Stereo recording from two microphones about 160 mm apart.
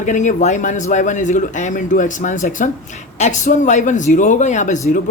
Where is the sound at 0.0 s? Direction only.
50° left (ahead or behind).